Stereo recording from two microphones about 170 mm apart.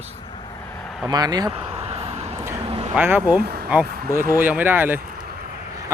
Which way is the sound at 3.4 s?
65° right (ahead or behind).